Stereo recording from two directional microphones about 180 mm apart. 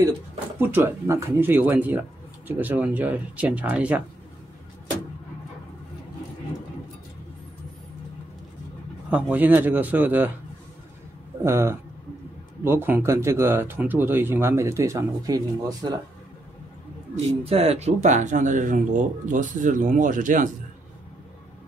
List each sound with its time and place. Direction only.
0.6 s speech: 10° right (ahead or behind)
9.1 s speech: 10° right (ahead or behind)
11.4 s speech: 15° right (ahead or behind)
17.5 s speech: 35° right (ahead or behind)